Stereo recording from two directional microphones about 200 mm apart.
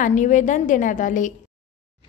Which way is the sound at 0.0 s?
40° left (ahead or behind).